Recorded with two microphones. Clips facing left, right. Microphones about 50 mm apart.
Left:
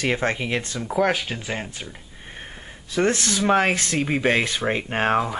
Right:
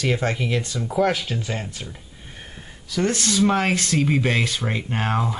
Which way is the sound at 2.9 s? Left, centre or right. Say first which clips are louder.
Left 1 dB; left.